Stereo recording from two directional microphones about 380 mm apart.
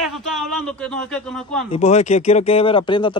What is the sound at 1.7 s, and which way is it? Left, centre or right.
Speech, centre.